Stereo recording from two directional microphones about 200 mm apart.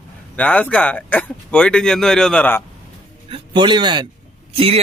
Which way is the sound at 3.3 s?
20° right (ahead or behind).